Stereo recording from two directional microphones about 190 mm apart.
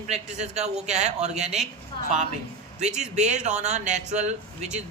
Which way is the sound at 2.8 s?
35° right (ahead or behind).